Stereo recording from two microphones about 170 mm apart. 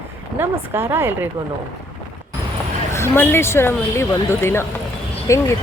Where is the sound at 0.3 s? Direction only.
15° right (ahead or behind).